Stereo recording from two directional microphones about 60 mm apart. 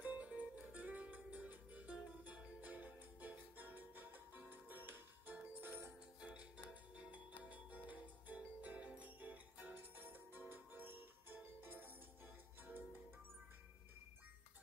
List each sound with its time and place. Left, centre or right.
0.0 s music: right
6.2 s music: right